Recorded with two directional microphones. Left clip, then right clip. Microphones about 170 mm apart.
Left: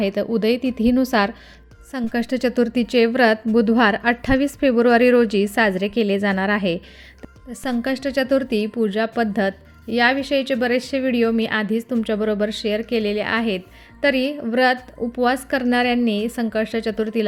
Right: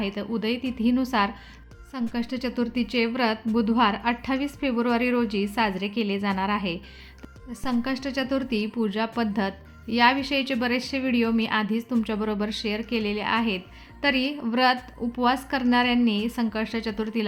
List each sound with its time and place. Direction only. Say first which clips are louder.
0.0 s a woman's voice: left 9 dB; 40° left (ahead or behind); by 17.2 s 20° left (ahead or behind)